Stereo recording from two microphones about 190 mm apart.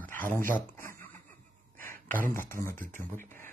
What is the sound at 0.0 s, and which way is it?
Dog, 45° right (ahead or behind).